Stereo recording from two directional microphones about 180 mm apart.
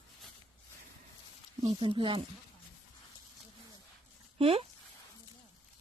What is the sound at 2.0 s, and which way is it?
Speech, 30° right (ahead or behind).